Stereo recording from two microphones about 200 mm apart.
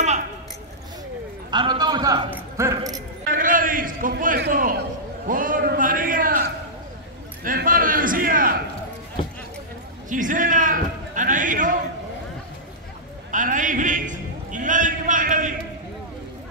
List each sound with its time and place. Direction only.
1.5 s a man's voice: 20° right (ahead or behind)
3.3 s a man's voice: 45° right (ahead or behind)
10.0 s a man's voice: 40° right (ahead or behind)
13.3 s a man's voice: 40° right (ahead or behind)